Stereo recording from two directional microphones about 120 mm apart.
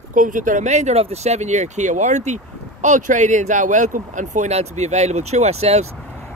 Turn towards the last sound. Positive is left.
turn(degrees=-60)  # may be behind; listen again after turning